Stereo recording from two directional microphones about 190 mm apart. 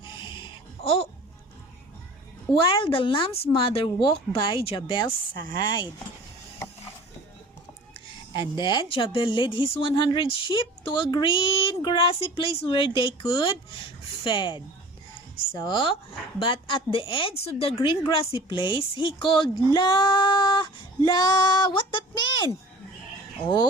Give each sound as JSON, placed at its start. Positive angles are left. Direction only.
{"t": 0.2, "sound": "a sound", "side_deg": 25}
{"t": 2.6, "sound": "a woman's voice", "side_deg": 25}
{"t": 8.3, "sound": "a woman's voice", "side_deg": 25}